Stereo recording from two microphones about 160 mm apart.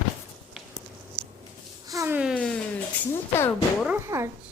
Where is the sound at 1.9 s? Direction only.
15° right (ahead or behind).